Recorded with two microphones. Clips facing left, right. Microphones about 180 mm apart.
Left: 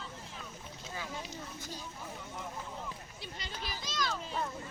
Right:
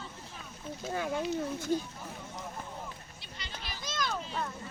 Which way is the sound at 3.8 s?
50° right (ahead or behind).